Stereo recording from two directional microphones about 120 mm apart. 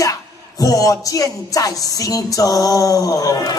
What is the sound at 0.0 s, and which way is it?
Music, 30° left (ahead or behind).